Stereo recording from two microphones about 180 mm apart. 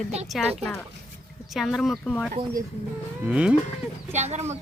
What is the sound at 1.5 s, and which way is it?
Speech, centre (ahead or behind).